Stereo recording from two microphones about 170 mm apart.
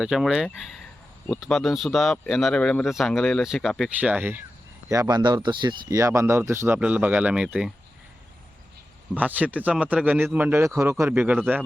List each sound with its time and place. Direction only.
0.0 s speech: 5° right (ahead or behind)
4.9 s speech: 20° right (ahead or behind); by 7.7 s 5° right (ahead or behind)
9.1 s speech: 10° right (ahead or behind)